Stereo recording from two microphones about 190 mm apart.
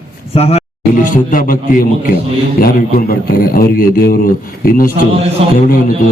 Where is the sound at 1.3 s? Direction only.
45° left (ahead or behind).